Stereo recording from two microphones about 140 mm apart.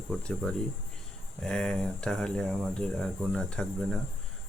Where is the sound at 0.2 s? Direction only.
5° left (ahead or behind).